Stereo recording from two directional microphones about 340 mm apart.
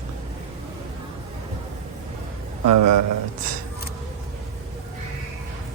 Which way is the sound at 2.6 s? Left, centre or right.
Right.